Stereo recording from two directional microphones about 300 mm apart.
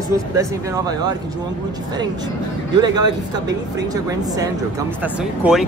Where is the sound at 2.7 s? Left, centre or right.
Centre.